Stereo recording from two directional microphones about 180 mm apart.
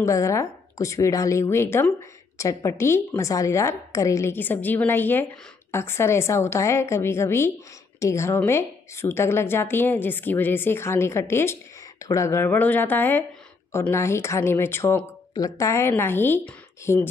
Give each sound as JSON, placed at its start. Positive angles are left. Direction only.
{"t": 0.0, "sound": "a woman's voice", "side_deg": 15}